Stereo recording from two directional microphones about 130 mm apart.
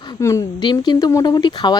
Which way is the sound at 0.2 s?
25° left (ahead or behind).